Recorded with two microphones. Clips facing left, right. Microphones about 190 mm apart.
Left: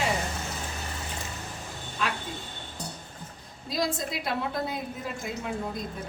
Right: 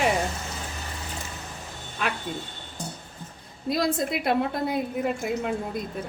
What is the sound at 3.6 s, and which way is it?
A woman's voice, 60° right (ahead or behind).